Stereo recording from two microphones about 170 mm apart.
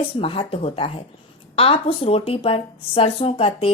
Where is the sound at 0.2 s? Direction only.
35° left (ahead or behind).